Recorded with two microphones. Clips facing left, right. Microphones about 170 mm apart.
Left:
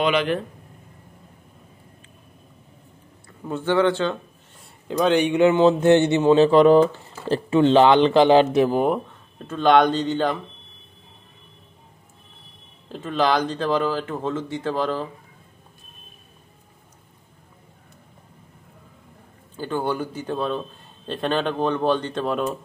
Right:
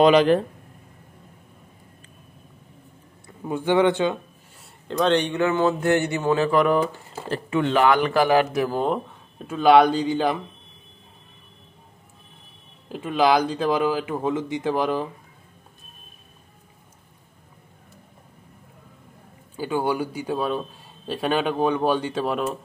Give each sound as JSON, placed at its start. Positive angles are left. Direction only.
{"t": 0.0, "sound": "speech", "side_deg": -35}
{"t": 3.4, "sound": "a man's voice", "side_deg": -15}
{"t": 4.8, "sound": "a man's voice", "side_deg": 5}
{"t": 9.4, "sound": "a man's voice", "side_deg": -10}
{"t": 12.8, "sound": "a man's voice", "side_deg": -10}
{"t": 19.5, "sound": "a man's voice", "side_deg": -10}